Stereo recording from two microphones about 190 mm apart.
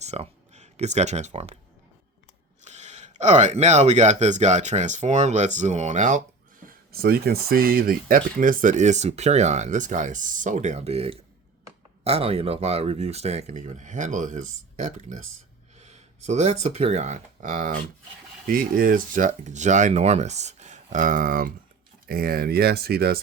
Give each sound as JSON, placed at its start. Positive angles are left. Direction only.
{"t": 0.0, "sound": "speech", "side_deg": -35}
{"t": 2.6, "sound": "speech", "side_deg": -35}
{"t": 6.7, "sound": "speech", "side_deg": -50}